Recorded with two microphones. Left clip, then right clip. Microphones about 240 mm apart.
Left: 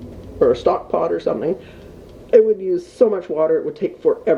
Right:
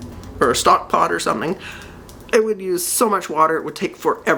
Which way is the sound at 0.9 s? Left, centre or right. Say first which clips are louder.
Right 2 dB; right.